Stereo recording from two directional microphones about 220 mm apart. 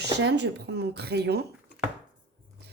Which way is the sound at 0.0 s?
50° right (ahead or behind).